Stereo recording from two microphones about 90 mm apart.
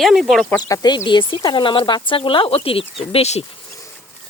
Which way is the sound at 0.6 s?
50° left (ahead or behind).